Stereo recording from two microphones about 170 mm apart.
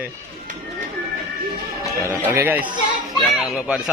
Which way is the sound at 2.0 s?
15° right (ahead or behind).